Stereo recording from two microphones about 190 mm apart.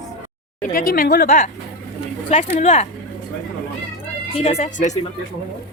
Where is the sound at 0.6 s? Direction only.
50° left (ahead or behind).